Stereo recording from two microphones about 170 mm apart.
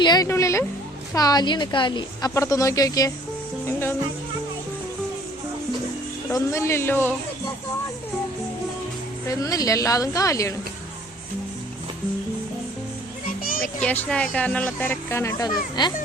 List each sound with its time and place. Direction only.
0.0 s speech: 25° left (ahead or behind)
3.7 s music: 15° left (ahead or behind)
6.3 s speech: 15° left (ahead or behind)
9.3 s speech: 20° left (ahead or behind)
13.4 s music: 55° left (ahead or behind)
13.8 s speech: 10° left (ahead or behind); by 15.9 s 25° left (ahead or behind)